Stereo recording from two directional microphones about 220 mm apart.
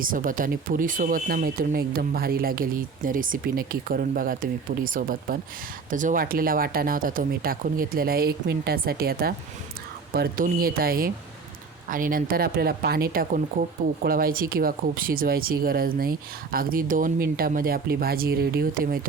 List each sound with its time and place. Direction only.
0.0 s speech: 40° right (ahead or behind)